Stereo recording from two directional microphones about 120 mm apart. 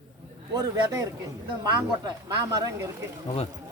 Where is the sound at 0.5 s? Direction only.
25° right (ahead or behind).